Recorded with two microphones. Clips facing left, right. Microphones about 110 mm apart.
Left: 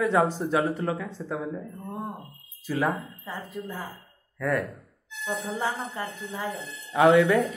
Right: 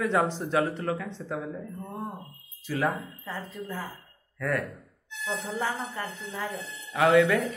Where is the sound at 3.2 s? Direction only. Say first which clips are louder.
Left 1 dB; 15° left (ahead or behind).